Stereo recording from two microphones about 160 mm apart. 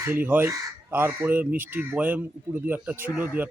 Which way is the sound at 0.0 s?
10° right (ahead or behind).